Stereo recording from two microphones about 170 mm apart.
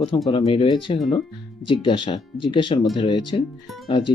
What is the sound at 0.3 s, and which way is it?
Speech, 30° left (ahead or behind).